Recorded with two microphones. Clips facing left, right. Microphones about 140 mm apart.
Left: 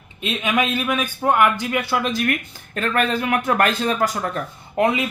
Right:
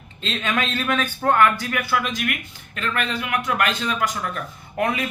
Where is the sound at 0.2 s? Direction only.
15° left (ahead or behind); by 4.4 s 40° left (ahead or behind).